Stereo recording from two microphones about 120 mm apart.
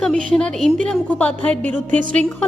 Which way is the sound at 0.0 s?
10° left (ahead or behind).